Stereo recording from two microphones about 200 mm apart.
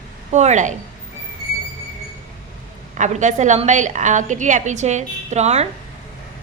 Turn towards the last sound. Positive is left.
turn(degrees=-35)  # may be behind; listen again after turning